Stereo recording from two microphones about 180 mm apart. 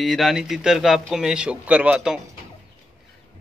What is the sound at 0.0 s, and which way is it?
Speech, centre (ahead or behind).